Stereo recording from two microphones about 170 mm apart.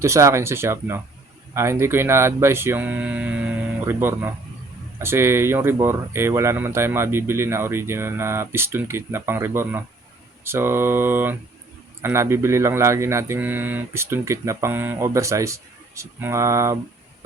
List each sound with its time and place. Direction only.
0.0 s speech: 15° right (ahead or behind)